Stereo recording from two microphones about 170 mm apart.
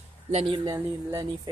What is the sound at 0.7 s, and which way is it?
Speech, 20° right (ahead or behind).